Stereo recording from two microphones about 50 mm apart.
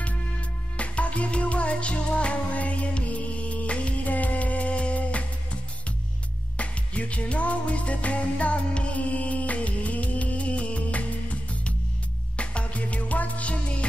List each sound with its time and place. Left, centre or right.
0.7 s music: left
6.5 s music: left